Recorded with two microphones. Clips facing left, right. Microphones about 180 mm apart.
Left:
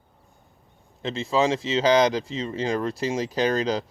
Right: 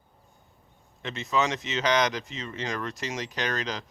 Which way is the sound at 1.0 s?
30° left (ahead or behind).